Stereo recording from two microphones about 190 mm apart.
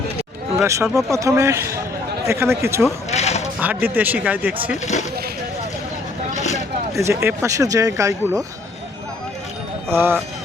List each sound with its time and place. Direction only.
0.7 s speech: 15° right (ahead or behind)
3.1 s a sound: 35° left (ahead or behind)
3.6 s speech: 10° right (ahead or behind)
6.9 s speech: 15° right (ahead or behind)
9.9 s speech: 10° right (ahead or behind)